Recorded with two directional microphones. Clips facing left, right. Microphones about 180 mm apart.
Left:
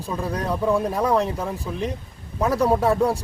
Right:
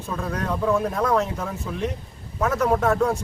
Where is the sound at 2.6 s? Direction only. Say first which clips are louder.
Even; 15° left (ahead or behind).